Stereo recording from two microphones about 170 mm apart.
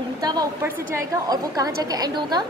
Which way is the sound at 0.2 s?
25° right (ahead or behind).